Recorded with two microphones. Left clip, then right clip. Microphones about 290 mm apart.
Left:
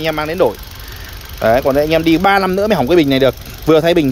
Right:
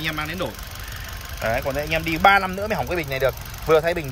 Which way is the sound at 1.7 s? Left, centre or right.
Left.